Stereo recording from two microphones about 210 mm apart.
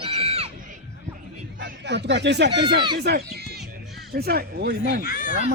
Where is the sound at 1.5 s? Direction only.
55° right (ahead or behind).